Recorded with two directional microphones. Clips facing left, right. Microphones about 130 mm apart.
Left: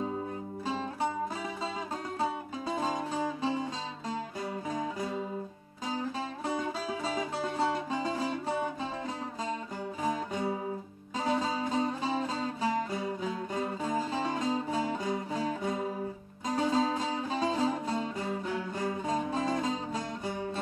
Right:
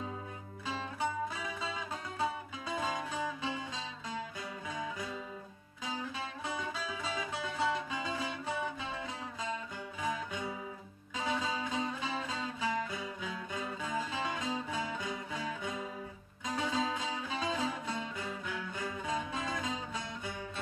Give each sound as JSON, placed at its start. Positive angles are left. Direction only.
{"t": 2.1, "sound": "music", "side_deg": 35}
{"t": 4.6, "sound": "music", "side_deg": 40}
{"t": 10.0, "sound": "music", "side_deg": 40}